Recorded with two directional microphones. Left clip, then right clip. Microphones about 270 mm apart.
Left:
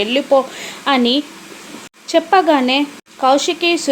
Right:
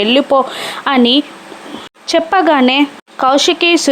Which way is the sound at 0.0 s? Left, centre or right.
Centre.